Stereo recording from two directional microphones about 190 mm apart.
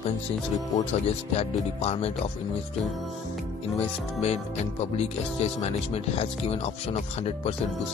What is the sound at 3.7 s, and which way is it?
Speech, 35° left (ahead or behind).